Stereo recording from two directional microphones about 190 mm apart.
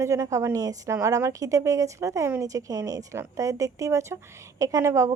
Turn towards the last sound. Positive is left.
turn(degrees=-15)  # may be behind; listen again after turning